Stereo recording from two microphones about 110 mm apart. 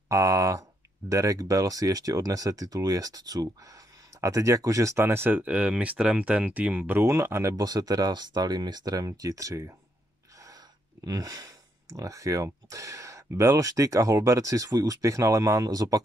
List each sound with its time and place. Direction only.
0.1 s speech: 30° right (ahead or behind)
7.5 s speech: 35° right (ahead or behind)